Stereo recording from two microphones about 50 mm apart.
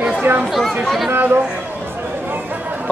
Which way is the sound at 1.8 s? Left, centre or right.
Right.